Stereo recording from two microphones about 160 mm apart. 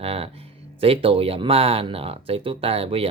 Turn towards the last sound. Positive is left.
turn(degrees=-35)  # may be behind; listen again after turning